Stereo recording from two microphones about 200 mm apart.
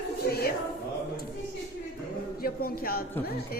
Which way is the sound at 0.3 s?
50° left (ahead or behind).